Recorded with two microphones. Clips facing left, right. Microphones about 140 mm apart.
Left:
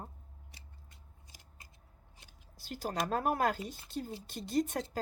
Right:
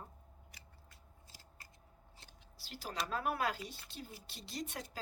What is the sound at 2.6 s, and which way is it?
Speech, 45° left (ahead or behind).